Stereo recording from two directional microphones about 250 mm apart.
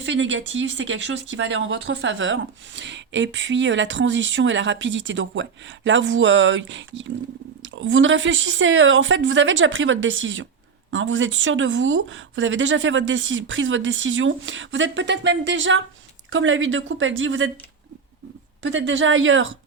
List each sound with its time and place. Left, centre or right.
0.0 s speech: right
18.6 s speech: right